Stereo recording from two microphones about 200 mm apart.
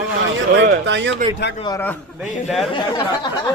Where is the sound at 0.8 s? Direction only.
65° right (ahead or behind).